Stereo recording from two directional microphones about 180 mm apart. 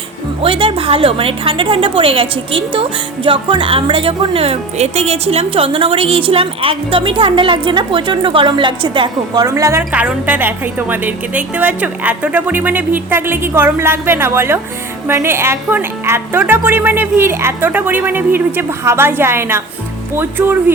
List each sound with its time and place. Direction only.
0.4 s a woman's voice: 30° right (ahead or behind); by 20.7 s 10° right (ahead or behind)